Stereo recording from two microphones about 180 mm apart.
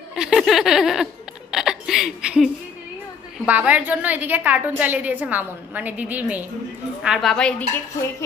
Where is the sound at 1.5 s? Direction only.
5° right (ahead or behind).